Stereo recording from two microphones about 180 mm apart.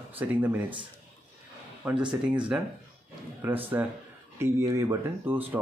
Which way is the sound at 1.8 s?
10° right (ahead or behind).